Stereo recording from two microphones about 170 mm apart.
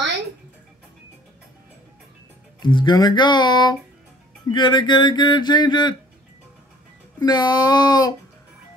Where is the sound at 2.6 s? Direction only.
25° left (ahead or behind).